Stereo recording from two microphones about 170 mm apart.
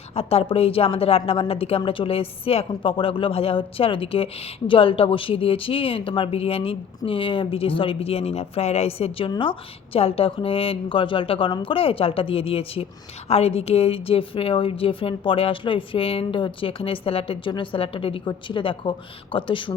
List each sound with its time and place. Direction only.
0.1 s a woman's voice: 35° left (ahead or behind)